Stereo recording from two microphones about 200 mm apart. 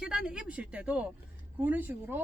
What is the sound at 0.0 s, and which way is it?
Speech, 5° right (ahead or behind).